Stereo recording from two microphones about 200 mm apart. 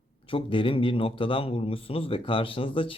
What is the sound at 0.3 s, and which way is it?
A man's voice, 25° left (ahead or behind).